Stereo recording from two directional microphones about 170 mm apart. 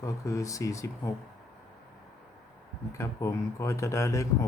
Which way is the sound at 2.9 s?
15° left (ahead or behind).